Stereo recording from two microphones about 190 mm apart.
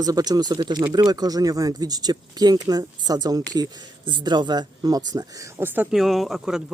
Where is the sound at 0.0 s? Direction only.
20° right (ahead or behind).